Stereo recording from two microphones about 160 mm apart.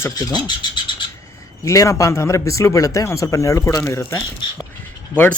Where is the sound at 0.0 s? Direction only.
25° left (ahead or behind).